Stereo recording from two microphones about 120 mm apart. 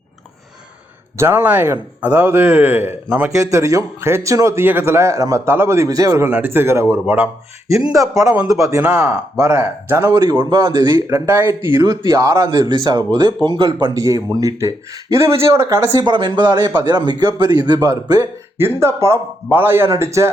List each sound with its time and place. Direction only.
1.1 s speech: 20° right (ahead or behind)
3.3 s speech: 25° right (ahead or behind)
7.9 s speech: 30° right (ahead or behind)
10.2 s speech: 35° right (ahead or behind)
16.0 s speech: 40° right (ahead or behind)
18.5 s speech: 20° right (ahead or behind)